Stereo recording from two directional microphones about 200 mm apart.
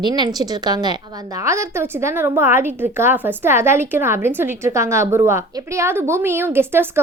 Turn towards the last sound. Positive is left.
turn(degrees=-10)  # may be behind; listen again after turning